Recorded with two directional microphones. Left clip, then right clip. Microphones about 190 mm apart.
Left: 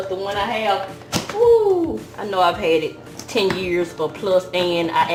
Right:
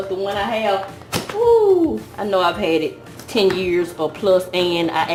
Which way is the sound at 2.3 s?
40° right (ahead or behind).